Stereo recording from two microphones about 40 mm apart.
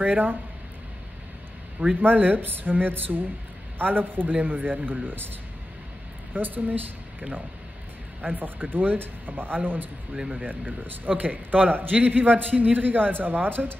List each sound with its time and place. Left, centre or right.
0.0 s a man's voice: right
2.0 s a man's voice: right
6.3 s a man's voice: right